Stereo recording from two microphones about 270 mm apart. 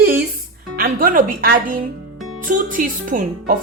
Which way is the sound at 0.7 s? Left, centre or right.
Right.